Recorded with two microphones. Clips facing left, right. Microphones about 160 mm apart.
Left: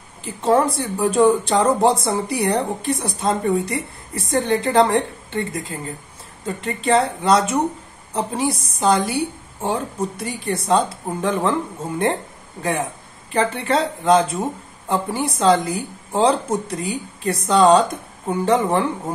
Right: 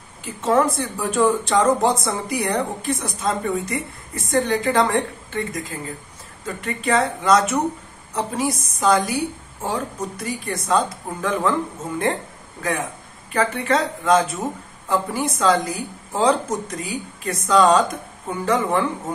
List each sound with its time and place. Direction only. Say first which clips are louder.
0.2 s speech: left 1 dB; 30° left (ahead or behind)
13.3 s speech: left 1 dB; 30° left (ahead or behind)